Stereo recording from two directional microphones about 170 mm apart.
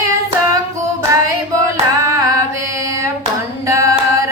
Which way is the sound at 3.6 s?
20° right (ahead or behind).